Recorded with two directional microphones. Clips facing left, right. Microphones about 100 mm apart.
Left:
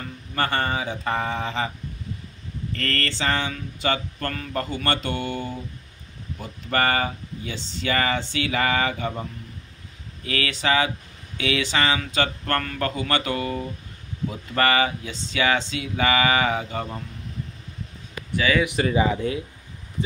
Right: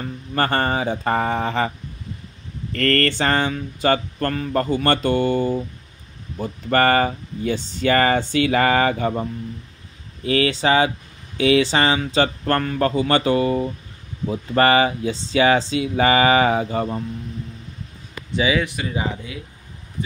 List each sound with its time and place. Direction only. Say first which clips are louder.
0.0 s speech: right 4 dB; 40° right (ahead or behind)
2.7 s a sound: right 9 dB; 55° right (ahead or behind)
6.3 s speech: right 6 dB; 40° right (ahead or behind)
10.2 s a sound: right 6 dB; 30° right (ahead or behind)
18.8 s speech: left 5 dB; 35° left (ahead or behind)
19.2 s speech: left 8 dB; 50° left (ahead or behind)